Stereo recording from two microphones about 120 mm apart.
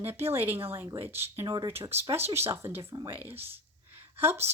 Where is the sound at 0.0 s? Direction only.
20° right (ahead or behind).